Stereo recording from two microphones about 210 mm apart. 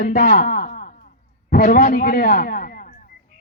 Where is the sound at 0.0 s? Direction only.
40° left (ahead or behind).